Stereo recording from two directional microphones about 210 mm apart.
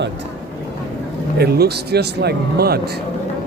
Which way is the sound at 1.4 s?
50° right (ahead or behind).